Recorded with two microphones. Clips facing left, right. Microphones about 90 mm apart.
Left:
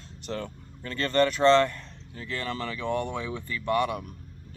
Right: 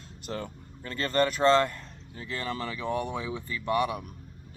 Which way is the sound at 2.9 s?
15° right (ahead or behind).